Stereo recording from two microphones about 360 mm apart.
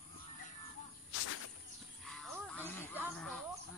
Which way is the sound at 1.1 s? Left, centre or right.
Left.